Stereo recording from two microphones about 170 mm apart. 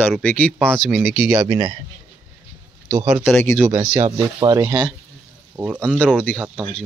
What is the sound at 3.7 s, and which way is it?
Speech, 45° right (ahead or behind).